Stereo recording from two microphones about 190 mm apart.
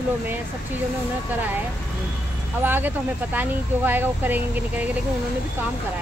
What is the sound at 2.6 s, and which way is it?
Speech, 10° right (ahead or behind).